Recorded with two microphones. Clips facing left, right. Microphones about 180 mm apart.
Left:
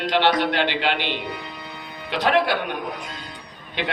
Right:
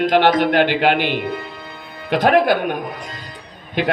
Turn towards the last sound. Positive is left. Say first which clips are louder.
# right 8 dB
turn(degrees=-45)  # may be behind; listen again after turning